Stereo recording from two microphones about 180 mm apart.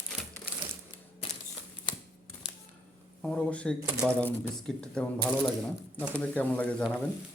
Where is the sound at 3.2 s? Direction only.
5° left (ahead or behind).